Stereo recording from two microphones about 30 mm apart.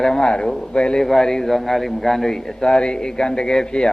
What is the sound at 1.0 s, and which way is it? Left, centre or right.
Speech, centre.